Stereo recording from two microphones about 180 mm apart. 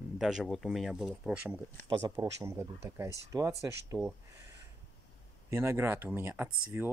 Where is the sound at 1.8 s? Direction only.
20° right (ahead or behind).